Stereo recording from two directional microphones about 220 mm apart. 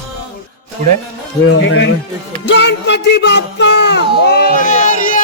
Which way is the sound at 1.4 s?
55° left (ahead or behind).